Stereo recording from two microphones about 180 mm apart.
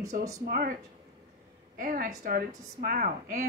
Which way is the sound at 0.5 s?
50° right (ahead or behind).